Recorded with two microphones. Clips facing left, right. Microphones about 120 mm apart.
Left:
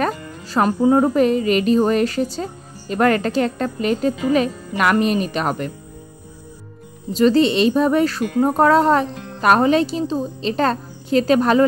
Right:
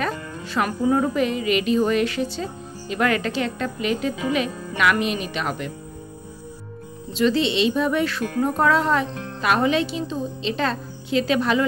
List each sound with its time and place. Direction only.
0.0 s music: 40° left (ahead or behind)
0.7 s a woman's voice: 35° left (ahead or behind)
7.1 s a woman's voice: 40° left (ahead or behind)